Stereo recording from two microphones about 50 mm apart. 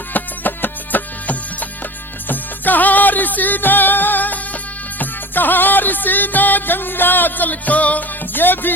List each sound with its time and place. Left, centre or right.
0.1 s music: left